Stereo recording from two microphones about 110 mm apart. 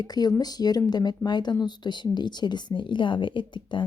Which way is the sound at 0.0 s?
35° left (ahead or behind).